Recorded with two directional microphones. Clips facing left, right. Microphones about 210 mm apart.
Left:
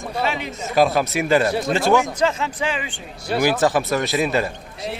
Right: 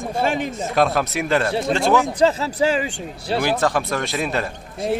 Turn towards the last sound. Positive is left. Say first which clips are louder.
# right 7 dB
turn(degrees=-50)  # may be behind; listen again after turning